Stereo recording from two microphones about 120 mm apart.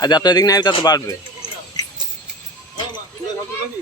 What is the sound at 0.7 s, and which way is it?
Speech, 45° left (ahead or behind).